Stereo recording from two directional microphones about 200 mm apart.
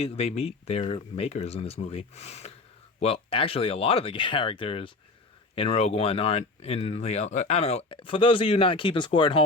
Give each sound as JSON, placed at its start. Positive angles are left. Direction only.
{"t": 0.0, "sound": "speech", "side_deg": 30}